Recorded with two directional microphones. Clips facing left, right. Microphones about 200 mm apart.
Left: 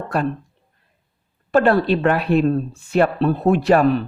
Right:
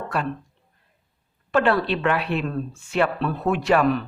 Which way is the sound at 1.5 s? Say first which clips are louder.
Left 5 dB; 40° left (ahead or behind).